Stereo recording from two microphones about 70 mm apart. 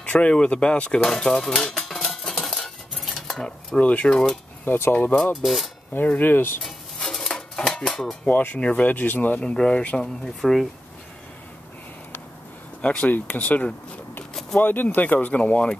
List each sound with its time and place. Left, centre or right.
0.0 s speech: centre
2.4 s cutlery: centre
3.8 s speech: left
4.1 s speech: centre
4.6 s speech: left
5.1 s speech: centre
5.4 s speech: centre
5.9 s speech: left
6.6 s music: centre
8.3 s speech: left
9.4 s speech: centre
12.8 s speech: centre